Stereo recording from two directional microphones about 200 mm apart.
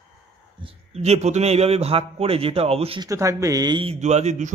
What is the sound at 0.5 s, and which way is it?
Speech, 30° right (ahead or behind).